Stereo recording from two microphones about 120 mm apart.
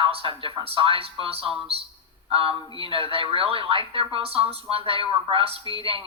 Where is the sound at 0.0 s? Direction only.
50° right (ahead or behind).